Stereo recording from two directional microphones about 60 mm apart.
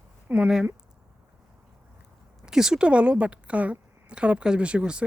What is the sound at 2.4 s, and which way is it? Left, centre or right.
A woman's voice, centre.